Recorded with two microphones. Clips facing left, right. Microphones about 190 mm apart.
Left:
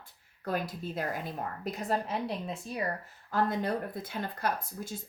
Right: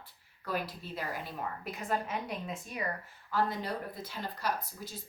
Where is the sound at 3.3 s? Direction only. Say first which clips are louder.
Left 3 dB; 50° left (ahead or behind).